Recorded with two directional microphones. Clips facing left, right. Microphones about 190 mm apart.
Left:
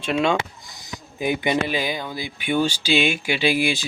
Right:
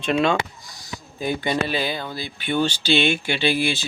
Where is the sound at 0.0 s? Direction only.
10° left (ahead or behind).